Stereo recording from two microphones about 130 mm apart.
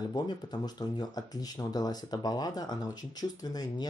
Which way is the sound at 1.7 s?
30° left (ahead or behind).